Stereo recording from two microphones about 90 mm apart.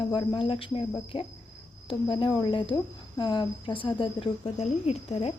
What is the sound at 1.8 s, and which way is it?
Cricket, 65° left (ahead or behind).